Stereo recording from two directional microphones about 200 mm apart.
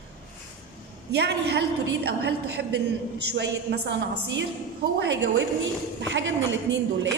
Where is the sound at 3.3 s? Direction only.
60° right (ahead or behind).